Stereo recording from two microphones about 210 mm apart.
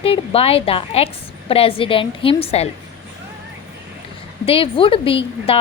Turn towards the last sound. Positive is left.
turn(degrees=25)  # may be behind; listen again after turning